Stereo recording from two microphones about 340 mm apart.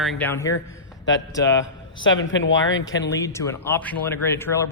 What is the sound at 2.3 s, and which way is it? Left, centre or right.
Speech, left.